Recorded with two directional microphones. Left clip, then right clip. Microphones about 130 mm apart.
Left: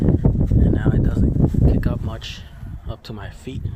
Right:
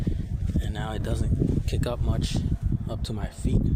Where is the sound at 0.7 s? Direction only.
25° right (ahead or behind).